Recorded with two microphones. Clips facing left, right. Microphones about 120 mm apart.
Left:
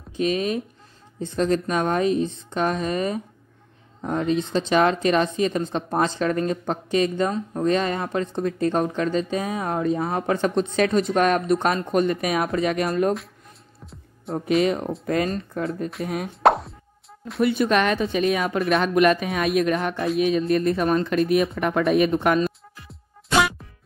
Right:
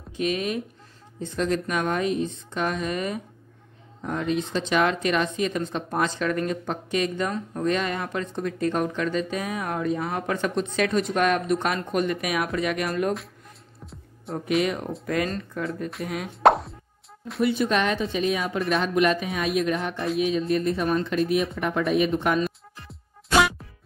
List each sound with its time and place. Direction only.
0.2 s speech: 35° left (ahead or behind)
14.3 s speech: 30° left (ahead or behind)
16.4 s plop: centre (ahead or behind)
17.4 s speech: 60° left (ahead or behind)
22.8 s music: centre (ahead or behind)